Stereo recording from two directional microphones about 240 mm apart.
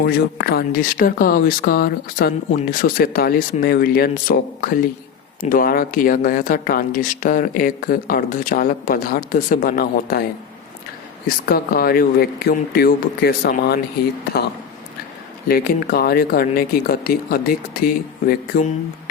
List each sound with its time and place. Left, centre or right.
0.0 s speech: left
11.4 s speech: left
15.4 s speech: left